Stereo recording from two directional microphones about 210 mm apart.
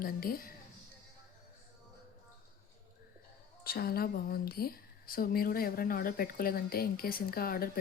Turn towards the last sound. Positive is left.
turn(degrees=45)  # may be behind; listen again after turning